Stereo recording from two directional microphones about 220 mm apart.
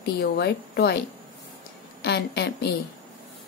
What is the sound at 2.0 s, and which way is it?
Speech, 50° left (ahead or behind).